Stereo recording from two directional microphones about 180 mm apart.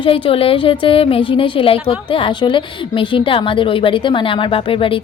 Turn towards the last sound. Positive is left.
turn(degrees=30)  # may be behind; listen again after turning